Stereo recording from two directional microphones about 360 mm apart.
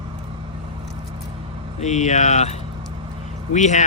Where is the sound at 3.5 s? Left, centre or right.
Centre.